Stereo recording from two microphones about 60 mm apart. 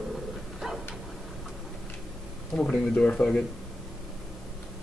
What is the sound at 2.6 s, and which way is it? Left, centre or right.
Speech, centre.